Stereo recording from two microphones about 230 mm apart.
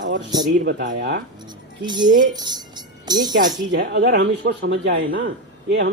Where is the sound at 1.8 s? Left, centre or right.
Centre.